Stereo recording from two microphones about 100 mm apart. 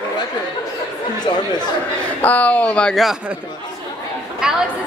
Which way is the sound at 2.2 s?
15° left (ahead or behind).